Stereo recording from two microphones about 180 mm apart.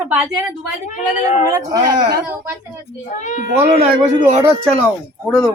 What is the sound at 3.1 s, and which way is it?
Speech, 45° left (ahead or behind).